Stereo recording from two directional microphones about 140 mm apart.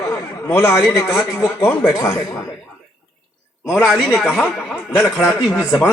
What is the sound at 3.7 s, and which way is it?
A man's voice, centre (ahead or behind).